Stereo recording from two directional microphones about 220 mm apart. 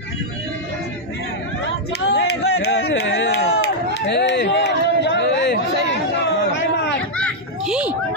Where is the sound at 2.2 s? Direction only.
50° left (ahead or behind).